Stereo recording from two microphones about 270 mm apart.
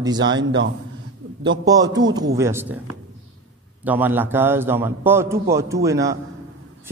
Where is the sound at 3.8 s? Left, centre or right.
Centre.